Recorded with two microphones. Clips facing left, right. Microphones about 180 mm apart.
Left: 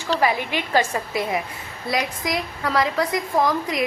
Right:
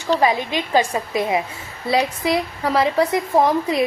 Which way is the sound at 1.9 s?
30° right (ahead or behind).